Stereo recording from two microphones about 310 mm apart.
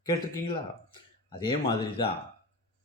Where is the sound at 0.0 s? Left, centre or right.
Centre.